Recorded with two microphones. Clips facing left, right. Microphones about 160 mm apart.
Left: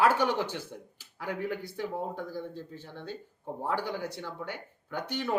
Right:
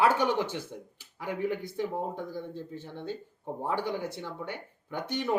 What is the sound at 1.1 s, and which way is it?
Speech, 20° right (ahead or behind).